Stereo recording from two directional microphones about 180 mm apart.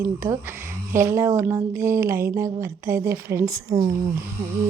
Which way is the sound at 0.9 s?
15° right (ahead or behind).